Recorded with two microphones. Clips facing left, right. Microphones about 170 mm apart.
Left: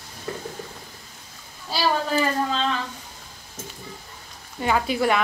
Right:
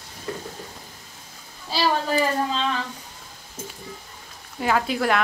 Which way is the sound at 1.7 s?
Centre (ahead or behind).